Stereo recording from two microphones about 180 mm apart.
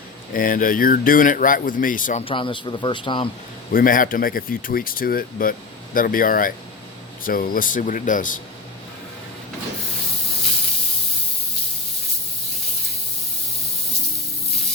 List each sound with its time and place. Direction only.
0.3 s speech: 50° left (ahead or behind)
2.2 s speech: 25° left (ahead or behind)
3.7 s speech: 50° left (ahead or behind)